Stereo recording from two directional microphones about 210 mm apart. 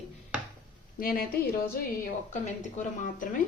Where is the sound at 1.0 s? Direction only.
45° left (ahead or behind).